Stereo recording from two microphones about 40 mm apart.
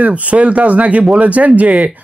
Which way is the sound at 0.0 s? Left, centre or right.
Right.